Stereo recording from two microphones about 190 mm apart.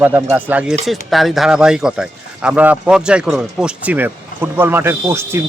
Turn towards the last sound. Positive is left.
turn(degrees=-15)  # may be behind; listen again after turning